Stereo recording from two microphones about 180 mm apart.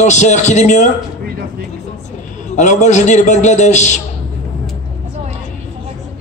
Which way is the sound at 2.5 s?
40° left (ahead or behind).